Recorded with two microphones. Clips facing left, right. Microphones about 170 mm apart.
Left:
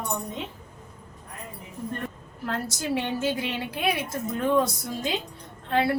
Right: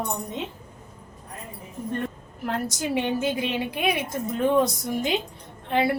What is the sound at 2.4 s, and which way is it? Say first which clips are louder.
A woman's voice: right 3 dB; 20° right (ahead or behind).